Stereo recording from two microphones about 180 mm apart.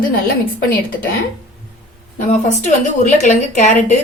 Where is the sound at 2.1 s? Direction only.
45° left (ahead or behind).